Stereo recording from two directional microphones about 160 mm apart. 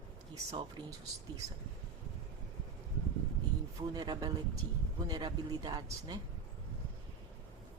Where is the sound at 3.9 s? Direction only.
25° right (ahead or behind).